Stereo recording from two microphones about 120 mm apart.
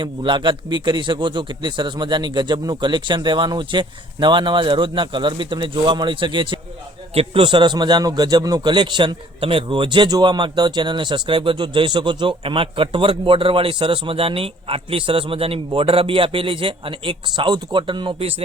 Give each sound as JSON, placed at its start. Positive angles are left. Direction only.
{"t": 0.0, "sound": "a man's voice", "side_deg": -40}